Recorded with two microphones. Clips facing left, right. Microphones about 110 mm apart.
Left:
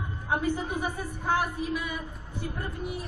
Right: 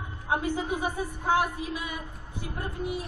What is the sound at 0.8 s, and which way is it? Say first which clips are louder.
Speech: right 2 dB; 20° right (ahead or behind).